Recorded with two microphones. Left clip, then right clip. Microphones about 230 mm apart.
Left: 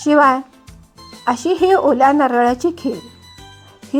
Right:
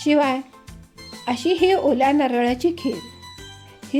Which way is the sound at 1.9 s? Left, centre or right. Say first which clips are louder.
Left 6 dB; left.